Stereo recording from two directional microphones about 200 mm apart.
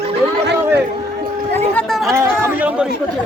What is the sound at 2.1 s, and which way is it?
Chatter, 10° right (ahead or behind).